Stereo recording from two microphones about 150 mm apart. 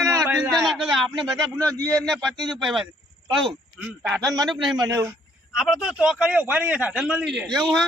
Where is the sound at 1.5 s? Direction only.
20° right (ahead or behind).